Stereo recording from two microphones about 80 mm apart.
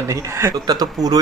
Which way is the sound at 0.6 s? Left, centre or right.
Right.